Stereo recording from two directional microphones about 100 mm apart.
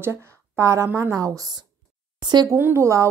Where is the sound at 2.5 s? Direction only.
25° right (ahead or behind).